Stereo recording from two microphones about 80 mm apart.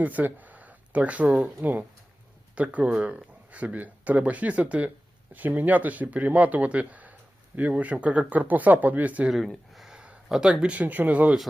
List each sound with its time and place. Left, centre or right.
0.0 s speech: centre
9.3 s speech: centre